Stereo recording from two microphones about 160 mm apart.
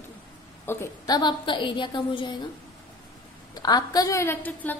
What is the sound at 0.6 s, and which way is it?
A woman's voice, 20° left (ahead or behind).